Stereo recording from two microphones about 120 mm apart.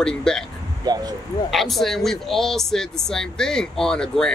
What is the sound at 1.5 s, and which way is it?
Speech, centre (ahead or behind).